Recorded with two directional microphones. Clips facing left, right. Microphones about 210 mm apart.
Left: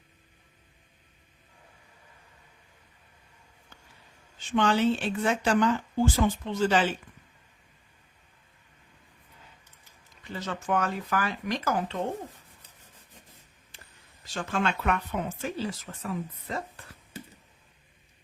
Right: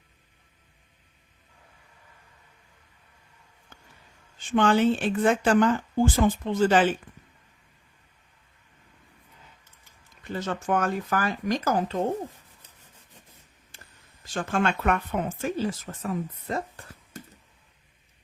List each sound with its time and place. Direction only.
4.5 s speech: 50° right (ahead or behind)
10.3 s speech: 50° right (ahead or behind)
14.3 s speech: 50° right (ahead or behind)